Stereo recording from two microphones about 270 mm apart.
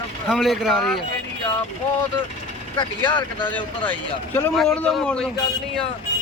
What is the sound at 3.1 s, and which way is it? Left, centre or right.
Speech, centre.